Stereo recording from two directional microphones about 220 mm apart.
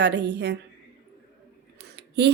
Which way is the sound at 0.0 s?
50° right (ahead or behind).